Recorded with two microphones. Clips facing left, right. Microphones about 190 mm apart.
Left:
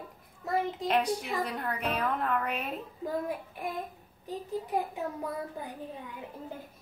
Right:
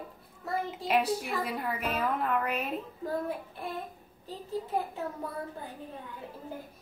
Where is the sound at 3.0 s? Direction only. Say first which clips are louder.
Left 1 dB; 15° left (ahead or behind).